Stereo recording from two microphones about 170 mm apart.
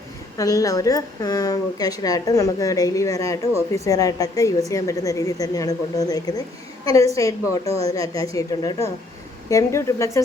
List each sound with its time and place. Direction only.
0.3 s a woman's voice: 20° left (ahead or behind)